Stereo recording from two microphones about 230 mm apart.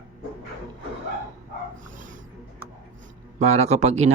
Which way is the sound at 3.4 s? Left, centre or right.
Right.